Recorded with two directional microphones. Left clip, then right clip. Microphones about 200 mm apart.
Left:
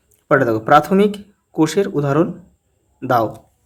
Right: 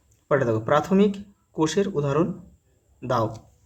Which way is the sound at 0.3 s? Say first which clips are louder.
Left 8 dB; 35° left (ahead or behind).